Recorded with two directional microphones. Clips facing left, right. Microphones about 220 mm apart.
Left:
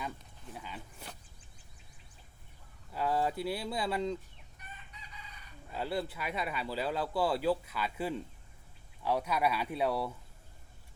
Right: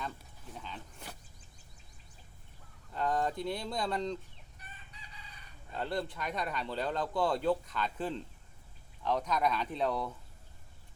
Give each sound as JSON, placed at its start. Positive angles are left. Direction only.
{"t": 0.5, "sound": "speech", "side_deg": 10}
{"t": 2.9, "sound": "speech", "side_deg": 5}
{"t": 4.5, "sound": "chicken", "side_deg": -35}
{"t": 5.7, "sound": "speech", "side_deg": 5}